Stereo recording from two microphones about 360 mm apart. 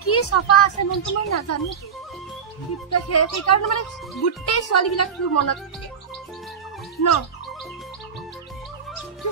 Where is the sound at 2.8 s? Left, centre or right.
Left.